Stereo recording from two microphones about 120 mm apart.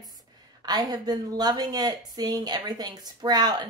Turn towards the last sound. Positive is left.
turn(degrees=-35)  # may be behind; listen again after turning